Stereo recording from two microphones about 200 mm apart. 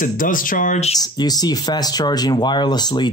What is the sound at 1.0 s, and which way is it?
Speech, 20° left (ahead or behind).